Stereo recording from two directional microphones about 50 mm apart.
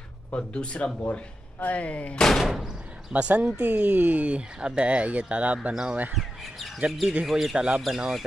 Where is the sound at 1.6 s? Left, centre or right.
Left.